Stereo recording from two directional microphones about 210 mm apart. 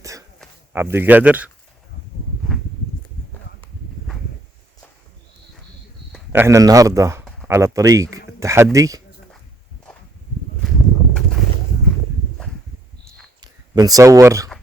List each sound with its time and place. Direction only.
0.0 s a sound: 15° right (ahead or behind)
0.7 s a man's voice: 10° right (ahead or behind)
6.3 s a man's voice: 10° right (ahead or behind)
13.4 s speech: 20° right (ahead or behind)